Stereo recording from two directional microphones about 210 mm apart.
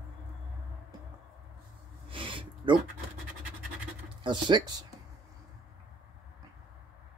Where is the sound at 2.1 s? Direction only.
25° right (ahead or behind).